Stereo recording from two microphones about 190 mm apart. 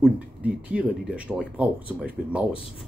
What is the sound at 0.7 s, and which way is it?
Speech, 5° right (ahead or behind).